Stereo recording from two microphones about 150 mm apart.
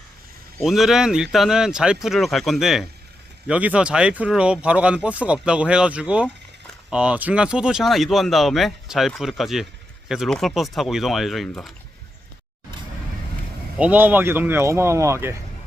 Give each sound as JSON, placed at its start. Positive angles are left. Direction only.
{"t": 0.6, "sound": "speech", "side_deg": 0}
{"t": 13.7, "sound": "speech", "side_deg": -10}